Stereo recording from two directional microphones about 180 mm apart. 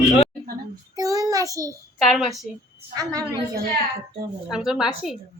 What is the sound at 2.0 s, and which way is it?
Speech, centre (ahead or behind).